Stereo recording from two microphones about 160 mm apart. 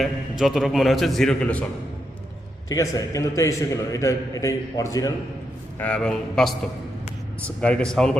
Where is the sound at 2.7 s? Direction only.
20° left (ahead or behind).